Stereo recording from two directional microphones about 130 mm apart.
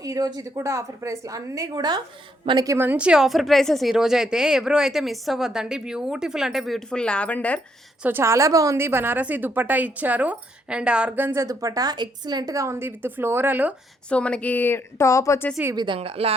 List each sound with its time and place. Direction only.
0.0 s a woman's voice: 30° right (ahead or behind)
2.7 s speech: 15° right (ahead or behind); by 7.6 s 10° left (ahead or behind)
8.0 s a woman's voice: 20° right (ahead or behind)
14.1 s a woman's voice: 10° left (ahead or behind)
15.7 s speech: 35° right (ahead or behind)
16.0 s a woman's voice: 50° right (ahead or behind)